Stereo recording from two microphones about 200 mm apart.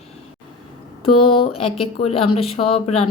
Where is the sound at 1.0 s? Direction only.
25° left (ahead or behind).